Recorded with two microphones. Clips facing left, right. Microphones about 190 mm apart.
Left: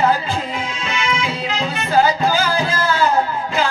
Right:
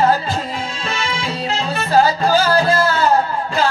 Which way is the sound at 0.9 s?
35° right (ahead or behind).